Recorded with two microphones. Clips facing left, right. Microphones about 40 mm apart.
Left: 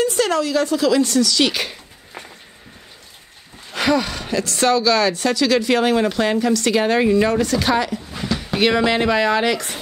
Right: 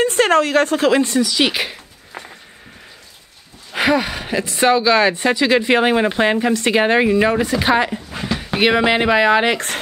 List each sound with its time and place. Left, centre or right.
0.0 s a woman's voice: right
1.0 s a sound: right
3.7 s a woman's voice: centre